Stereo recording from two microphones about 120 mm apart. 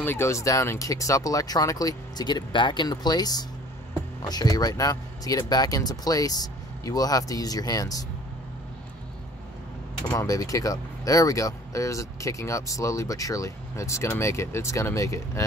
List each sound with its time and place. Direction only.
0.0 s speech: 20° left (ahead or behind)
10.2 s speech: 30° left (ahead or behind)